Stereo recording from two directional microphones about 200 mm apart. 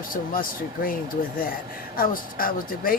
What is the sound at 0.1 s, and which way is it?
Speech, 45° left (ahead or behind).